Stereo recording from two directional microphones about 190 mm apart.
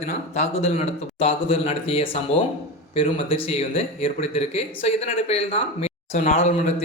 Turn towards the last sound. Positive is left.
turn(degrees=35)  # may be behind; listen again after turning